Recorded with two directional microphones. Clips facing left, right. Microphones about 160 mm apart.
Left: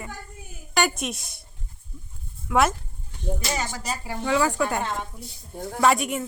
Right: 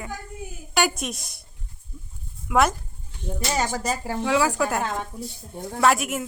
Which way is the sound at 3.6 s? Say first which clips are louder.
Right 6 dB; 45° right (ahead or behind).